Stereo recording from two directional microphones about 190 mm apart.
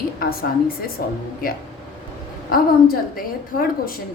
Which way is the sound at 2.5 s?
50° left (ahead or behind).